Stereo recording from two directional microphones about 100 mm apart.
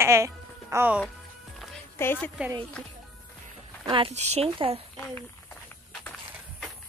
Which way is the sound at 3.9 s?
75° right (ahead or behind).